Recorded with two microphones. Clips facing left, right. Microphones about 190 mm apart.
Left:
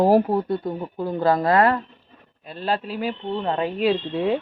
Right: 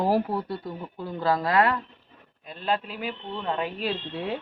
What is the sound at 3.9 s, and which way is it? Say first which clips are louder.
Speech: left 9 dB; 65° left (ahead or behind).